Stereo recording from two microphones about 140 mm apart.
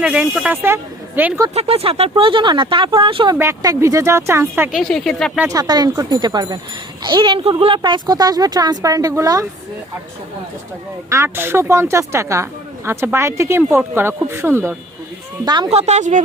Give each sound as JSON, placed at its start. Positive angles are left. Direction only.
{"t": 0.0, "sound": "a woman's voice", "side_deg": -5}
{"t": 1.5, "sound": "speech", "side_deg": -45}
{"t": 3.3, "sound": "speech", "side_deg": -20}
{"t": 4.7, "sound": "speech", "side_deg": 0}
{"t": 5.5, "sound": "speech", "side_deg": -30}
{"t": 7.8, "sound": "speech", "side_deg": -30}
{"t": 11.1, "sound": "a woman's voice", "side_deg": -20}
{"t": 15.4, "sound": "speech", "side_deg": -30}
{"t": 15.7, "sound": "speech", "side_deg": -50}